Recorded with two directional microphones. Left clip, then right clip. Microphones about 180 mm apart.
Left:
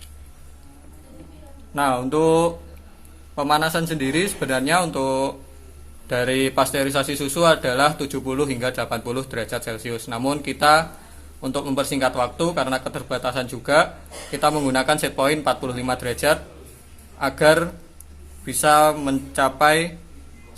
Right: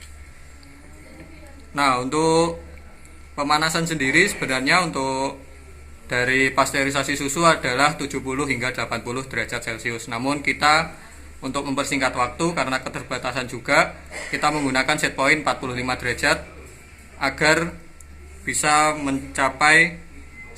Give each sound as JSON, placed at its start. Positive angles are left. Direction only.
{"t": 1.7, "sound": "a man's voice", "side_deg": 40}
{"t": 17.2, "sound": "a man's voice", "side_deg": 40}